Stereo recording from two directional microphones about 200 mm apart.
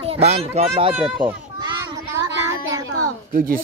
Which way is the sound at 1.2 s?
20° right (ahead or behind).